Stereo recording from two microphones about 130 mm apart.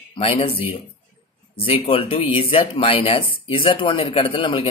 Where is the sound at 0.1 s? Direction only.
50° left (ahead or behind).